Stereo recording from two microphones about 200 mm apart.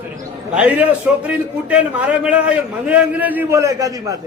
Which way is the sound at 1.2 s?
5° right (ahead or behind).